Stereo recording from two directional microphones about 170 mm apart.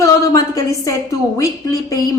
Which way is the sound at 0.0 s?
20° left (ahead or behind).